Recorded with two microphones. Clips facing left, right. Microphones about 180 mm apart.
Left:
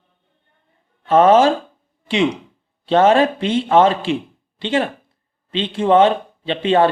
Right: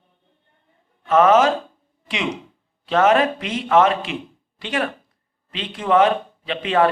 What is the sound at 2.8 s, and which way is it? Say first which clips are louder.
A man's voice: left 3 dB; 30° left (ahead or behind).